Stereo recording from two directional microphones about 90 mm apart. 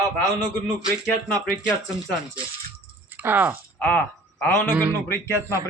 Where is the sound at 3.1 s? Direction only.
20° right (ahead or behind).